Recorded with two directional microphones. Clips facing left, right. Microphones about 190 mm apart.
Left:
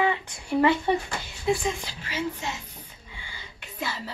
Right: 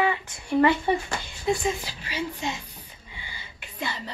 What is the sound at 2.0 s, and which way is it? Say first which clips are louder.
Speech: even; 15° right (ahead or behind).